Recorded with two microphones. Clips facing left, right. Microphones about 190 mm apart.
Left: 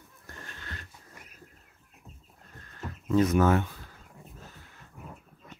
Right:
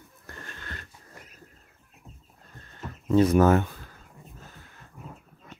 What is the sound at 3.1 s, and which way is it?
Speech, 30° right (ahead or behind).